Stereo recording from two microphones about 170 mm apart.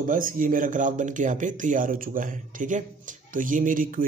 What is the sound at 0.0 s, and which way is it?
Speech, 55° right (ahead or behind).